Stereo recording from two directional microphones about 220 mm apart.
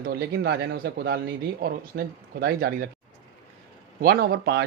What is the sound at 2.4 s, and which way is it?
Speech, 45° right (ahead or behind).